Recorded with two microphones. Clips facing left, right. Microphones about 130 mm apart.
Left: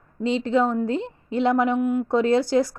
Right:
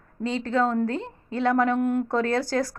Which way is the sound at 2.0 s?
15° left (ahead or behind).